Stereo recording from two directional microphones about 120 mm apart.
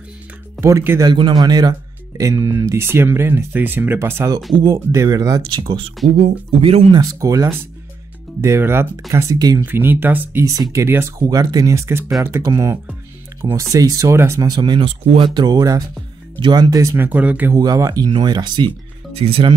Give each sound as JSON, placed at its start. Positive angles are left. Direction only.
{"t": 0.6, "sound": "speech", "side_deg": -25}
{"t": 1.1, "sound": "speech", "side_deg": -35}
{"t": 5.5, "sound": "speech", "side_deg": -45}
{"t": 6.0, "sound": "speech", "side_deg": -90}
{"t": 6.6, "sound": "speech", "side_deg": -55}
{"t": 6.9, "sound": "speech", "side_deg": -35}
{"t": 9.1, "sound": "speech", "side_deg": -30}
{"t": 9.7, "sound": "speech", "side_deg": -15}
{"t": 16.9, "sound": "speech", "side_deg": -15}
{"t": 17.6, "sound": "speech", "side_deg": -30}
{"t": 19.1, "sound": "speech", "side_deg": -55}